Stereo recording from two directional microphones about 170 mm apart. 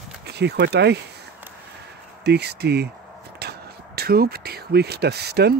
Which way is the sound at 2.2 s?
75° right (ahead or behind).